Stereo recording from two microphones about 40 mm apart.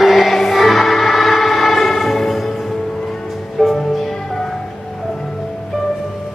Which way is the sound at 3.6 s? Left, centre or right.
Centre.